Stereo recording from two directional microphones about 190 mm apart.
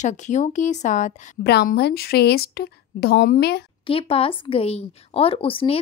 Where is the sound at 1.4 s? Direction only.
60° left (ahead or behind).